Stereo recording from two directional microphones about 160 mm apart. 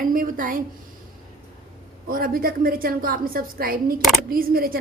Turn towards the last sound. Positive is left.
turn(degrees=-65)  # may be behind; listen again after turning